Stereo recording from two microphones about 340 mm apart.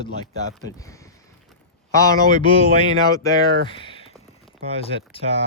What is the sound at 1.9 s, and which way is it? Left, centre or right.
Speech, centre.